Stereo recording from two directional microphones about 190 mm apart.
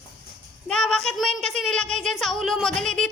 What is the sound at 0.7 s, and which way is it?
Child singing, 5° left (ahead or behind).